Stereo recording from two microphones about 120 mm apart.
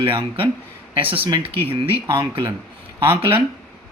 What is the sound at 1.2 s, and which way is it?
A man's voice, 45° right (ahead or behind).